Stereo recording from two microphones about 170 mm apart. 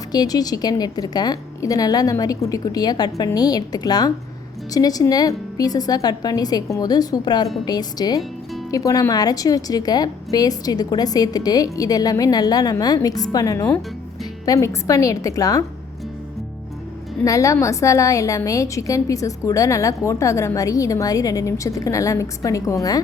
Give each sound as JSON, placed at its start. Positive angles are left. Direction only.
{"t": 0.1, "sound": "a woman's voice", "side_deg": 25}
{"t": 17.2, "sound": "a woman's voice", "side_deg": 20}